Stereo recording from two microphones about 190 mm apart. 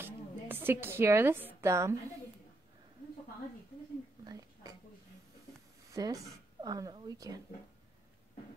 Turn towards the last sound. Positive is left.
turn(degrees=-20)  # may be behind; listen again after turning